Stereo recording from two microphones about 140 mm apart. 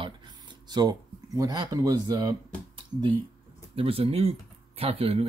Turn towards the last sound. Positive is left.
turn(degrees=-45)  # may be behind; listen again after turning